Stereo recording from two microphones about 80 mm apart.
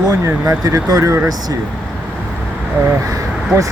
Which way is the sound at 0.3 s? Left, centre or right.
Right.